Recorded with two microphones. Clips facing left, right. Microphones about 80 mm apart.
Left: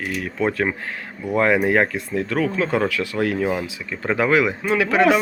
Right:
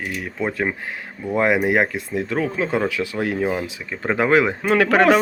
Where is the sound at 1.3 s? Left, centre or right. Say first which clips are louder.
Left 1 dB; centre.